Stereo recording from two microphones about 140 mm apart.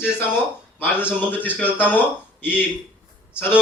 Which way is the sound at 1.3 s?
10° left (ahead or behind).